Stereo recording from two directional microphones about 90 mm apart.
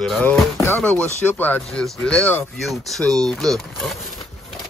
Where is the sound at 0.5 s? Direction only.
30° left (ahead or behind).